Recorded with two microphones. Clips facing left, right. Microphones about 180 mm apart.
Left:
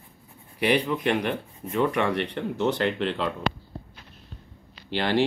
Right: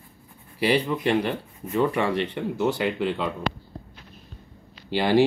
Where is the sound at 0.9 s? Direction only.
15° right (ahead or behind).